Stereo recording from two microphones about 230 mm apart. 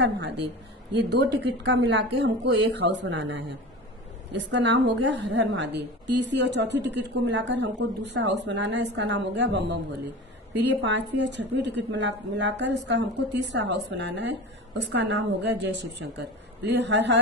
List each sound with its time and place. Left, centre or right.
0.0 s a woman's voice: right